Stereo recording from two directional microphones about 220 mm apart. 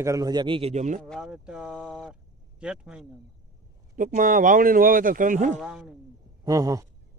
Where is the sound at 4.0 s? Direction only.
35° right (ahead or behind).